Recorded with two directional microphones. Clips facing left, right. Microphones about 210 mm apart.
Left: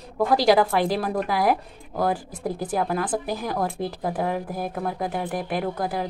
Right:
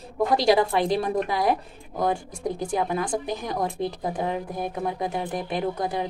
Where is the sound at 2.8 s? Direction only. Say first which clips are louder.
Left 2 dB; 20° right (ahead or behind).